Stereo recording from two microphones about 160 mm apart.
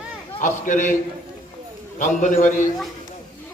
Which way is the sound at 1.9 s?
50° left (ahead or behind).